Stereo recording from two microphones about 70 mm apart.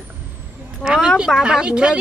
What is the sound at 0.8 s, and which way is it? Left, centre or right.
Speech, centre.